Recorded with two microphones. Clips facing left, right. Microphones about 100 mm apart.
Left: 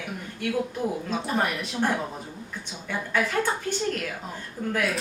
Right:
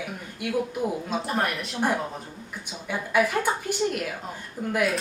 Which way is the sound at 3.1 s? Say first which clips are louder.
Right 2 dB; 10° right (ahead or behind).